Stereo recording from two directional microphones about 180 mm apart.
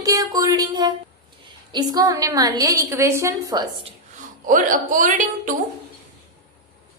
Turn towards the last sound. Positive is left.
turn(degrees=-45)  # may be behind; listen again after turning